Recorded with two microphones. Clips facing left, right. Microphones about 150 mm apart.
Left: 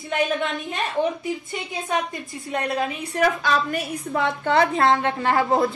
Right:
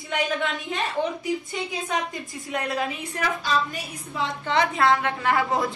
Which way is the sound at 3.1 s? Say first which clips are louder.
Left 8 dB; 50° left (ahead or behind).